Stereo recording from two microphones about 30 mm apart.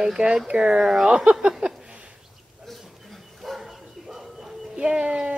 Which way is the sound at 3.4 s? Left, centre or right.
Centre.